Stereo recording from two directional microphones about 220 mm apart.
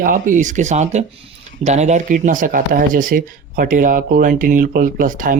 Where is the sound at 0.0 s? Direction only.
40° right (ahead or behind).